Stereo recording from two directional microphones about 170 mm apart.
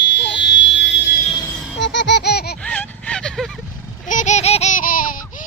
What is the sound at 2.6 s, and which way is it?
Vehicle, 5° left (ahead or behind).